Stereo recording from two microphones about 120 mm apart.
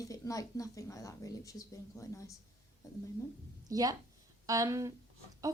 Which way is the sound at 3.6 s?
30° right (ahead or behind).